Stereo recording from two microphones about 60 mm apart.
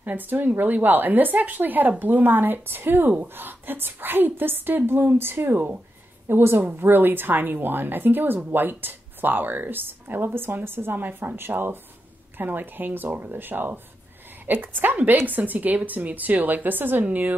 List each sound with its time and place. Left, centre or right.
0.0 s a woman's voice: right